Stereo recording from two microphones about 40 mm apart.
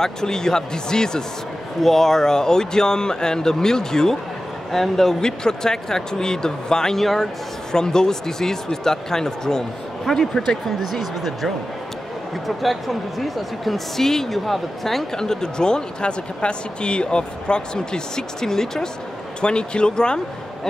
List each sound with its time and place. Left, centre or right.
0.0 s speech: centre
5.2 s speech: centre
10.8 s speech: centre
19.4 s speech: left